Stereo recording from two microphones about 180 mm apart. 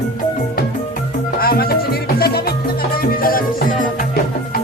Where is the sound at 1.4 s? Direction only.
55° left (ahead or behind).